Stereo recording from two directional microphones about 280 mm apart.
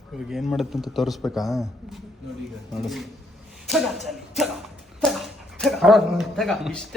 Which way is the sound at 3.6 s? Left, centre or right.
Centre.